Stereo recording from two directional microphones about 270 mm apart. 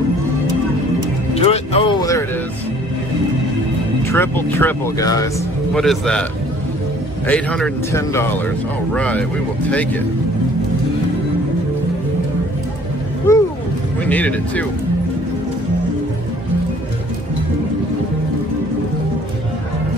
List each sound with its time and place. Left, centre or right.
1.3 s music: left
4.1 s speech: centre
5.8 s speech: centre
7.2 s speech: centre
13.3 s a sound: centre
14.0 s speech: centre